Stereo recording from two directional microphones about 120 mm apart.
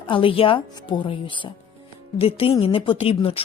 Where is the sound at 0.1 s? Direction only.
50° left (ahead or behind).